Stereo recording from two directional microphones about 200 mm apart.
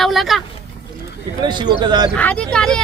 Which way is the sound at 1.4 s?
20° right (ahead or behind).